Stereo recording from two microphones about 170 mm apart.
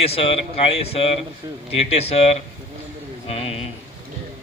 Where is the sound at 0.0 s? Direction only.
35° left (ahead or behind).